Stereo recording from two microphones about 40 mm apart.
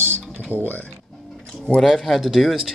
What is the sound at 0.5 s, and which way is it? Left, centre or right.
Speech, right.